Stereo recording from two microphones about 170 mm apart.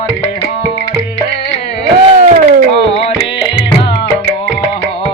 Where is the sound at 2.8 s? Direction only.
35° left (ahead or behind).